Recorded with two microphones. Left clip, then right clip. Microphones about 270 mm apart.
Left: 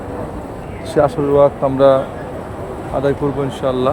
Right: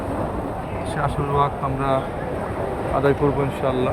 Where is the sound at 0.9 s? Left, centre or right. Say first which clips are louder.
Left 10 dB; left.